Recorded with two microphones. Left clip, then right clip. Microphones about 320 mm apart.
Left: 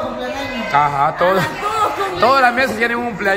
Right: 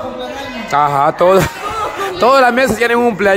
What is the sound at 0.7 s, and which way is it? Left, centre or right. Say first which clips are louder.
A man's voice: right 3 dB; right.